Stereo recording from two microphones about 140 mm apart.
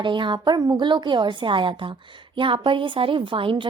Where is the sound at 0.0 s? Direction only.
35° right (ahead or behind).